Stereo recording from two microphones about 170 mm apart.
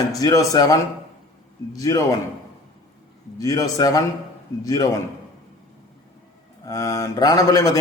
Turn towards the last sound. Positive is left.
turn(degrees=20)  # may be behind; listen again after turning